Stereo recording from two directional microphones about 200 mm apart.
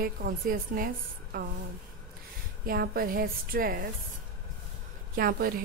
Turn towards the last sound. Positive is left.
turn(degrees=-45)  # may be behind; listen again after turning